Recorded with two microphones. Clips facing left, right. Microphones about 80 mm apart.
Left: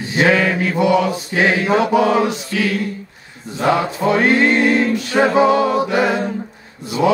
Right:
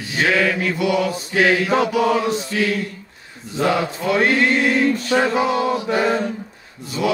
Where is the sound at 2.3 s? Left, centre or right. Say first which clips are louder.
Right 1 dB; right.